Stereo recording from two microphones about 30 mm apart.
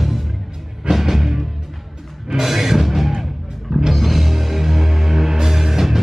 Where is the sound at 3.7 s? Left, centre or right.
Centre.